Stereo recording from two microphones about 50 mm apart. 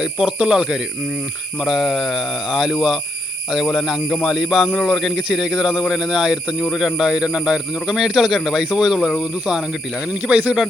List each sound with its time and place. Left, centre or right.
0.0 s speech: centre
1.6 s speech: centre
5.1 s speech: centre
10.1 s speech: right